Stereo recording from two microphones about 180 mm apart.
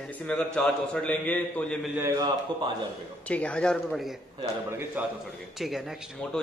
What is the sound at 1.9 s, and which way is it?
Speech, 15° right (ahead or behind).